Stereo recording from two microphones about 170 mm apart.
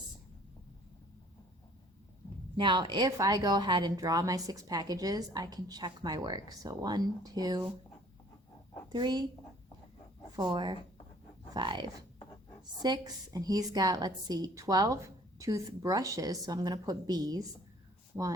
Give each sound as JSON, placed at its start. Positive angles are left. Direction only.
{"t": 2.6, "sound": "speech", "side_deg": -30}
{"t": 8.9, "sound": "speech", "side_deg": -25}
{"t": 10.3, "sound": "speech", "side_deg": -25}